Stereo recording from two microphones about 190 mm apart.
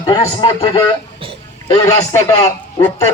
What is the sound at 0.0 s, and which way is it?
Speech, 25° left (ahead or behind).